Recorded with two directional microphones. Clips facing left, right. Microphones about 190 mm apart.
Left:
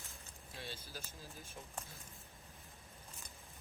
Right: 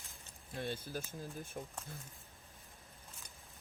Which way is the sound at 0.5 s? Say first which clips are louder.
Right 9 dB; 55° right (ahead or behind).